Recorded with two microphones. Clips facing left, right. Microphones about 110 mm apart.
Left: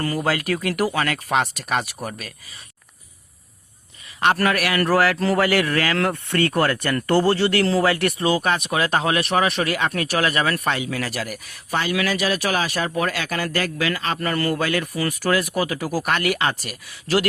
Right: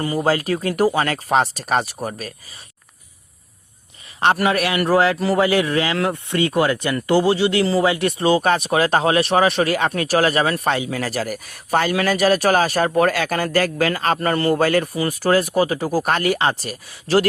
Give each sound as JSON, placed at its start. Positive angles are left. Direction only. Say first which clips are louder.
{"t": 0.0, "sound": "speech", "louder": "right 2 dB", "side_deg": -20}
{"t": 0.3, "sound": "speech", "louder": "right 5 dB", "side_deg": -30}
{"t": 4.4, "sound": "speech", "louder": "right 2 dB", "side_deg": -20}
{"t": 8.2, "sound": "speech", "louder": "right 7 dB", "side_deg": -30}
{"t": 14.2, "sound": "speech", "louder": "right 4 dB", "side_deg": -30}
{"t": 14.5, "sound": "speech", "louder": "right 6 dB", "side_deg": -40}
{"t": 14.9, "sound": "speech", "louder": "right 4 dB", "side_deg": -30}